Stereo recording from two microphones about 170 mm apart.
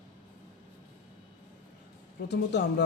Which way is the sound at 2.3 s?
85° left.